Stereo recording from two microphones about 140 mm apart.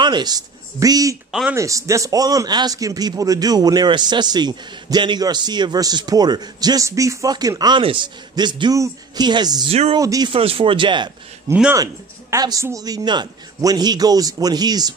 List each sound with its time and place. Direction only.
0.0 s a man's voice: 30° right (ahead or behind)
9.7 s speech: 45° right (ahead or behind)
9.9 s a man's voice: 25° right (ahead or behind)
10.3 s a man's voice: 45° right (ahead or behind)
11.7 s a man's voice: 25° right (ahead or behind)